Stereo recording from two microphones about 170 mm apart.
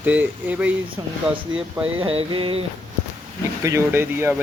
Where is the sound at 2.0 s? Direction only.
30° right (ahead or behind).